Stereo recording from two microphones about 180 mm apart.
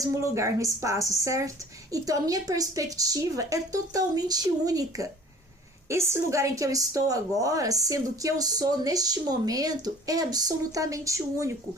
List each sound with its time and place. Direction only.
0.0 s a woman's voice: 15° right (ahead or behind)